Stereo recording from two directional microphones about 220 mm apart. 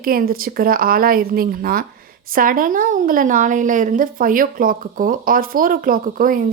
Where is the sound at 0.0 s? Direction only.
40° right (ahead or behind).